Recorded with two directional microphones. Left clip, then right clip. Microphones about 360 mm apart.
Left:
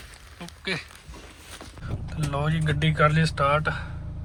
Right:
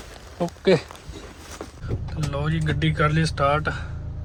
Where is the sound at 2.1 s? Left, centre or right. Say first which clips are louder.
Even; centre.